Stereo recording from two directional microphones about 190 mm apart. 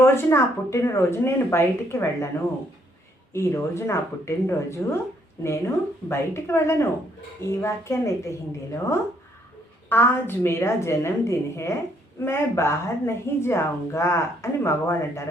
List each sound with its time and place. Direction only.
0.0 s a woman's voice: 10° left (ahead or behind)
3.3 s a woman's voice: 15° left (ahead or behind)
9.9 s a woman's voice: 10° left (ahead or behind)